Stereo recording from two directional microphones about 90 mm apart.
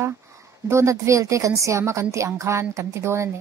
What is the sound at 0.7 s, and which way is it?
A woman's voice, 35° right (ahead or behind).